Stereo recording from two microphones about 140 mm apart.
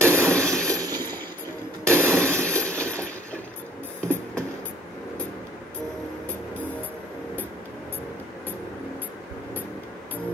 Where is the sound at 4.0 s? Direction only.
5° left (ahead or behind).